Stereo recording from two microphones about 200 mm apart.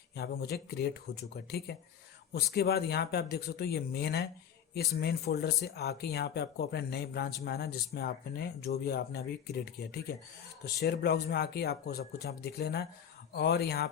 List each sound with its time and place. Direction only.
0.2 s speech: 55° left (ahead or behind)